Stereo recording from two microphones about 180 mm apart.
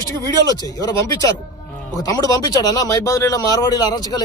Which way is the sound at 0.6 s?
20° left (ahead or behind).